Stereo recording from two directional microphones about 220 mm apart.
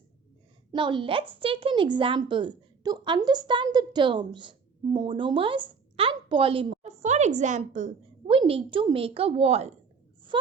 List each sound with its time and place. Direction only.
0.7 s a woman's voice: 20° right (ahead or behind)